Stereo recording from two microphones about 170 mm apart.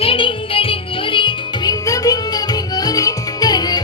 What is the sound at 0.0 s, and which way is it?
Music, 30° left (ahead or behind).